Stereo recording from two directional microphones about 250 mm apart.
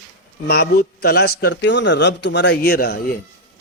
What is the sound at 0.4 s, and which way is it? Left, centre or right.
A man's voice, left.